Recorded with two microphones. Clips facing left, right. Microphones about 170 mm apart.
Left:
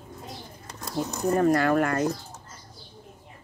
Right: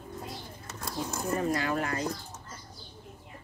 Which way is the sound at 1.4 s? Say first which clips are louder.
Left 10 dB; 55° left (ahead or behind).